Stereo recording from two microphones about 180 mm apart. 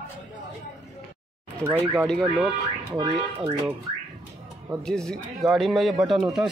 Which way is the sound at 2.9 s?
25° right (ahead or behind).